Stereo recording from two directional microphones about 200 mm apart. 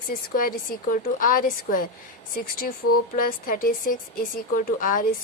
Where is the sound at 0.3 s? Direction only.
45° left (ahead or behind).